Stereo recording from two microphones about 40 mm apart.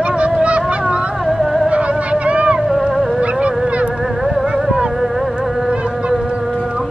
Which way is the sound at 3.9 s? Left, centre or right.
Centre.